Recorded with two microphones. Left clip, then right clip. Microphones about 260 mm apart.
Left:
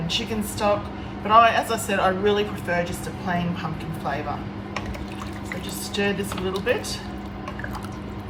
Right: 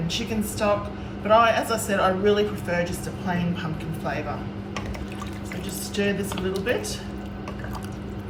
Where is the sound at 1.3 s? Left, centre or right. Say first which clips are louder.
Left 3 dB; right.